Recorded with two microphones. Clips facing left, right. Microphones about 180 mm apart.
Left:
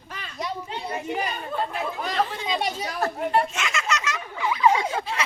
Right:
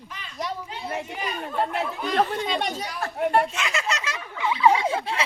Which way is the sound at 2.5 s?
5° left (ahead or behind).